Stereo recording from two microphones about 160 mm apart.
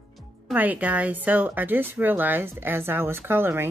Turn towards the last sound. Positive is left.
turn(degrees=-15)  # may be behind; listen again after turning